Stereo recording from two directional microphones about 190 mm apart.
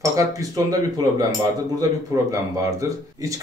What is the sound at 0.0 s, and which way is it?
Speech, 15° right (ahead or behind).